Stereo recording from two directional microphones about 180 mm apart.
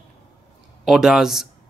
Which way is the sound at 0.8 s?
Centre (ahead or behind).